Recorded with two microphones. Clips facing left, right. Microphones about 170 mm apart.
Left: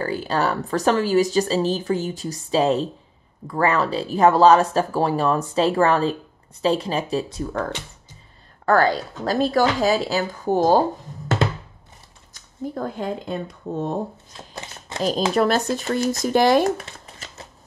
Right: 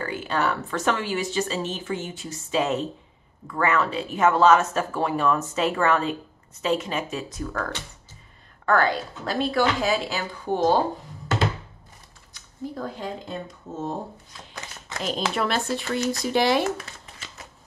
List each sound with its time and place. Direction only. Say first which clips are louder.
0.0 s speech: left 3 dB; 35° left (ahead or behind)
8.6 s speech: left 4 dB; 35° left (ahead or behind)
12.6 s speech: left 4 dB; 50° left (ahead or behind)
13.7 s speech: left 10 dB; 65° left (ahead or behind)
14.3 s speech: left 3 dB; 30° left (ahead or behind); by 16.7 s 45° left (ahead or behind)